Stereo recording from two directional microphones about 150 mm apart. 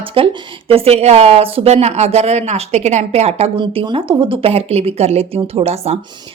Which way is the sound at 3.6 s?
35° right (ahead or behind).